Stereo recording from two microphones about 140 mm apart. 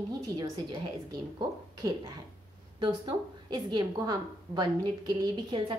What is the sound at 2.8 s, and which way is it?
Speech, 35° right (ahead or behind).